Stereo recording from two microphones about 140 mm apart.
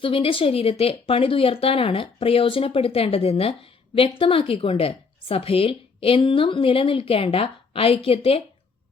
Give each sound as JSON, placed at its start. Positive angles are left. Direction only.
{"t": 0.0, "sound": "a woman's voice", "side_deg": 40}